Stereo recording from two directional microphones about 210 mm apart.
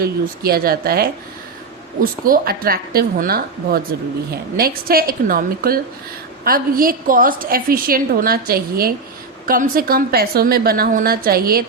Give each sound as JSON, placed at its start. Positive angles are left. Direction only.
{"t": 0.0, "sound": "a woman's voice", "side_deg": -45}